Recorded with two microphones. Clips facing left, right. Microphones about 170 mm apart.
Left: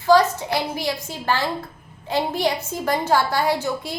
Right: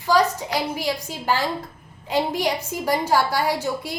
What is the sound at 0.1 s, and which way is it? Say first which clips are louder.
A woman's voice: left 3 dB; 15° right (ahead or behind).